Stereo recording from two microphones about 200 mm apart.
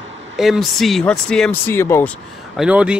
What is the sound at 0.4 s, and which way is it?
Speech, centre (ahead or behind).